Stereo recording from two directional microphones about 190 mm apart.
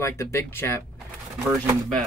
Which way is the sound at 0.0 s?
15° left (ahead or behind).